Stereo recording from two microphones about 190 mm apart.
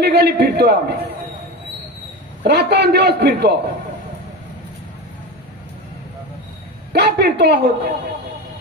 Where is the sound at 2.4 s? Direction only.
60° right (ahead or behind).